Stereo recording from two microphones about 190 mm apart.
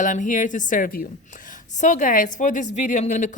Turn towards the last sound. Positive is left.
turn(degrees=40)  # may be behind; listen again after turning